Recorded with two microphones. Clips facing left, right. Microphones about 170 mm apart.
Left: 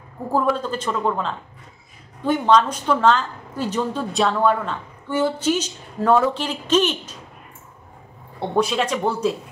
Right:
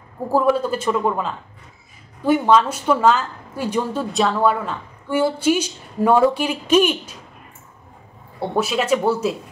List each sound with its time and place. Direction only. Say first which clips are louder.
0.3 s a woman's voice: right 3 dB; 10° right (ahead or behind)
8.4 s a woman's voice: even; 5° right (ahead or behind)